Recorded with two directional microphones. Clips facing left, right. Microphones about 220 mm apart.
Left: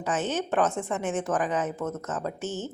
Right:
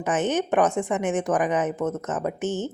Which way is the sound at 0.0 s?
20° right (ahead or behind).